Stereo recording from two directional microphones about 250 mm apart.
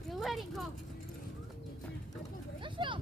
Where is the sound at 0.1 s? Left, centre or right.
Centre.